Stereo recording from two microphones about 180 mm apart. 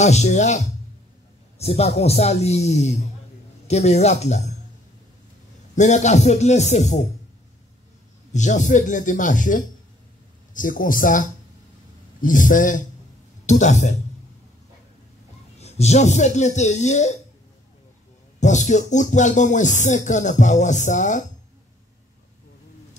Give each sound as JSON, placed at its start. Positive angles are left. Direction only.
{"t": 0.0, "sound": "speech", "side_deg": 40}
{"t": 5.8, "sound": "speech", "side_deg": 40}
{"t": 8.3, "sound": "speech", "side_deg": 40}
{"t": 15.6, "sound": "speech", "side_deg": 35}
{"t": 18.4, "sound": "speech", "side_deg": 40}